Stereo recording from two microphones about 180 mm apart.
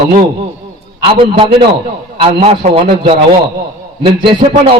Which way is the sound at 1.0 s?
30° right (ahead or behind).